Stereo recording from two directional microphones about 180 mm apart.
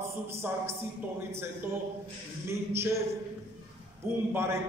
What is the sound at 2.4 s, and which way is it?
Speech, 15° right (ahead or behind).